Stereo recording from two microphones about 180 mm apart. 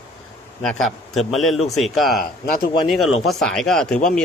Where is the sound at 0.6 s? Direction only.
Centre (ahead or behind).